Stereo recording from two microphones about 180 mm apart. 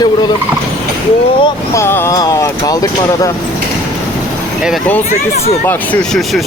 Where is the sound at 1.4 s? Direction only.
25° left (ahead or behind).